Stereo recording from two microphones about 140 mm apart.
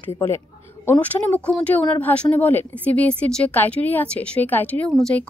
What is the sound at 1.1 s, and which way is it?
Speech, 10° left (ahead or behind).